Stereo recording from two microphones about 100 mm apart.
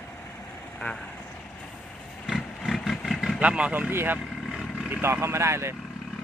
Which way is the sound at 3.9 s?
25° right (ahead or behind).